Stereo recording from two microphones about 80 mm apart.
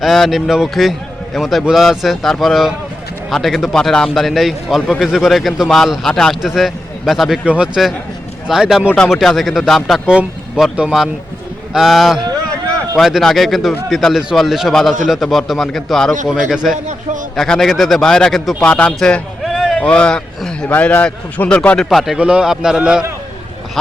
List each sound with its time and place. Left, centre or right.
0.0 s a man's voice: centre
7.4 s a man's voice: centre
11.7 s a man's voice: centre
18.6 s speech: centre
18.9 s a sound: centre
19.7 s a man's voice: centre
21.8 s a man's voice: centre
22.2 s a man's voice: centre